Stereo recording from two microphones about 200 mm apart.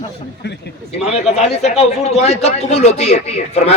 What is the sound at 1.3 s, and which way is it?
A man's voice, 35° left (ahead or behind).